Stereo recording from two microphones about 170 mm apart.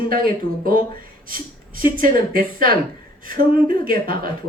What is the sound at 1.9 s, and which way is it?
A woman's voice, 55° right (ahead or behind).